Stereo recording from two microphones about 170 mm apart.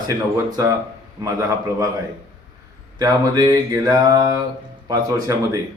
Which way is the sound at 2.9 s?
20° right (ahead or behind).